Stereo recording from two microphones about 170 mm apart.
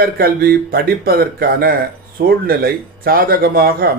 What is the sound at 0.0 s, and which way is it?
Speech, 60° right (ahead or behind).